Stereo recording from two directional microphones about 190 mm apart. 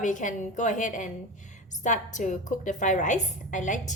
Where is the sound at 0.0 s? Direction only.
40° left (ahead or behind).